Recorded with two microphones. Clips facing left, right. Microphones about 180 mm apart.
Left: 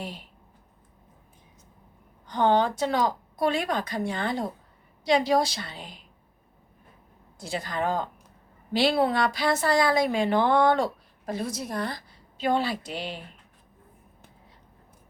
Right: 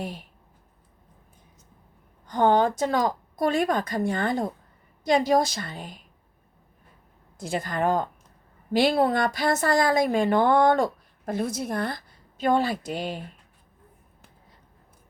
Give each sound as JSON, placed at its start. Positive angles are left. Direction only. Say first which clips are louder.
{"t": 2.2, "sound": "a woman's voice", "louder": "right 2 dB", "side_deg": -45}
{"t": 7.3, "sound": "a woman's voice", "louder": "right 3 dB", "side_deg": -50}